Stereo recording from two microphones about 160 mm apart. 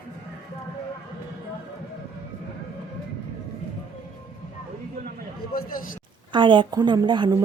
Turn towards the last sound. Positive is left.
turn(degrees=-30)  # may be behind; listen again after turning